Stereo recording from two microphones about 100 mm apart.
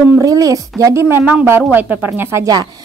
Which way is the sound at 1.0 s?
15° right (ahead or behind).